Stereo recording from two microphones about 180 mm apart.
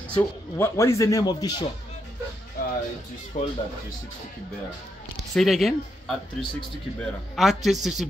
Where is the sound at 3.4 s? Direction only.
40° left (ahead or behind).